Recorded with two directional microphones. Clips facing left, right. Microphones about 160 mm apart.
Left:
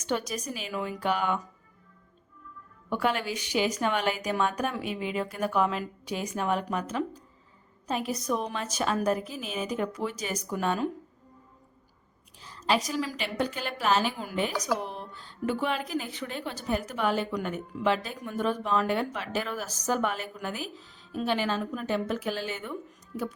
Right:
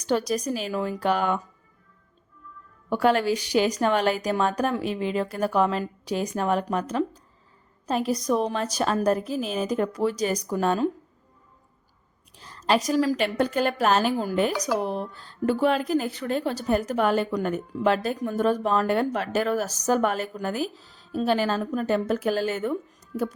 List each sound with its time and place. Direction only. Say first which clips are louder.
0.0 s speech: right 6 dB; 35° right (ahead or behind)
2.9 s speech: right 7 dB; 40° right (ahead or behind)
12.4 s a woman's voice: right 4 dB; 40° right (ahead or behind)